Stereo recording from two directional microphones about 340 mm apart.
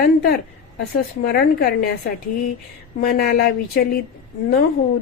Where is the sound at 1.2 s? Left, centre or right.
Left.